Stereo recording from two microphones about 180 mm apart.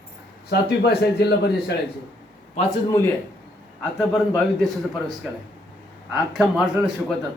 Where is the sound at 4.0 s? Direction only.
Centre (ahead or behind).